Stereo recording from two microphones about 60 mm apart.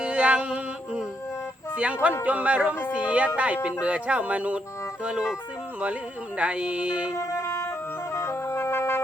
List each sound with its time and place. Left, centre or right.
0.0 s a sound: centre
1.7 s speech: centre
5.8 s speech: right
7.2 s music: left